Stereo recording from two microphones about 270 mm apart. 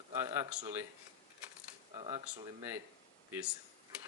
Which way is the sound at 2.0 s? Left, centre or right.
Centre.